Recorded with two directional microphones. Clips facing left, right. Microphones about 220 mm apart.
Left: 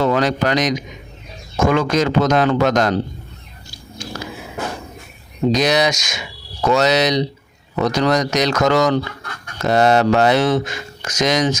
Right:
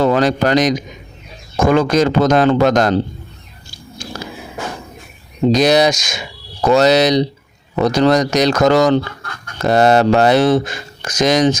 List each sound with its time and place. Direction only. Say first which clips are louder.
0.0 s speech: right 3 dB; 35° right (ahead or behind)
5.5 s speech: right 5 dB; 35° right (ahead or behind)